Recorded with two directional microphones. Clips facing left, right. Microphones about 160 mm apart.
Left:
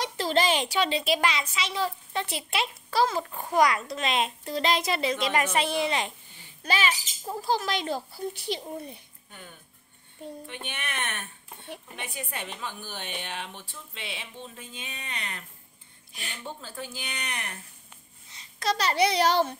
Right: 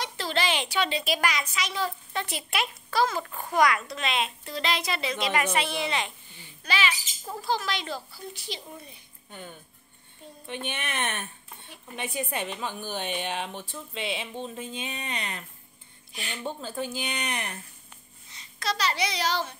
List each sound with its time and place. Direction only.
0.0 s a woman's voice: 40° left (ahead or behind)
10.5 s a woman's voice: 25° right (ahead or behind)
16.6 s a woman's voice: 20° right (ahead or behind)
18.6 s a child's voice: 45° left (ahead or behind)